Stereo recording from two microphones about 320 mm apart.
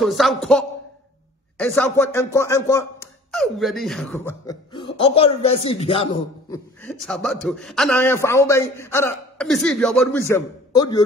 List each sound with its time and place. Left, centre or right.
0.0 s a man's voice: centre
6.8 s a man's voice: centre